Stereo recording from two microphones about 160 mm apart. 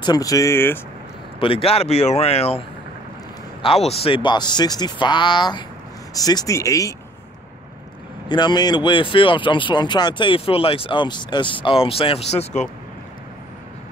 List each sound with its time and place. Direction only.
0.0 s speech: 25° left (ahead or behind)
1.4 s speech: 35° left (ahead or behind)
3.6 s speech: 40° left (ahead or behind); by 7.0 s 20° left (ahead or behind)
8.3 s speech: 25° left (ahead or behind)